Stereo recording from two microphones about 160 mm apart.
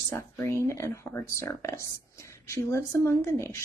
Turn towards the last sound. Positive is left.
turn(degrees=15)  # may be behind; listen again after turning